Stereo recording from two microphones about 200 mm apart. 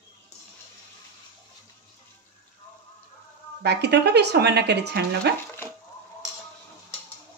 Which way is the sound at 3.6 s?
55° right (ahead or behind).